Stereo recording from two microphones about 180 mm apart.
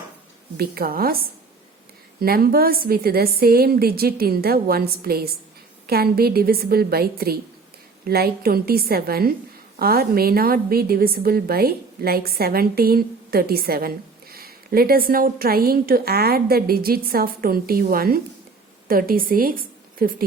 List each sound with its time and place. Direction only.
0.5 s a woman's voice: 55° right (ahead or behind)
2.2 s a woman's voice: 55° right (ahead or behind)